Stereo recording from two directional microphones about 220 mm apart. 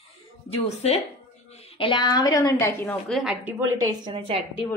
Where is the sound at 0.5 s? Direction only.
30° left (ahead or behind); by 3.5 s centre (ahead or behind).